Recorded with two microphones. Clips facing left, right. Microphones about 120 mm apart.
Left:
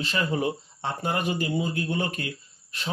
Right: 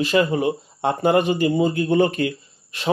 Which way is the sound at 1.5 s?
45° right (ahead or behind).